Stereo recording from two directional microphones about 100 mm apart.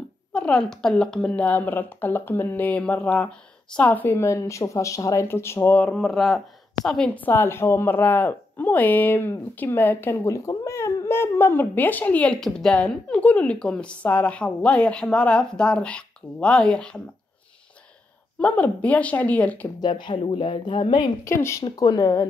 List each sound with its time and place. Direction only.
0.3 s a woman's voice: 10° left (ahead or behind)
7.2 s speech: 20° left (ahead or behind)
12.4 s a woman's voice: 5° left (ahead or behind)
18.4 s a woman's voice: 15° left (ahead or behind)
19.8 s speech: 50° left (ahead or behind)
21.2 s speech: 30° left (ahead or behind)
21.6 s speech: 40° left (ahead or behind)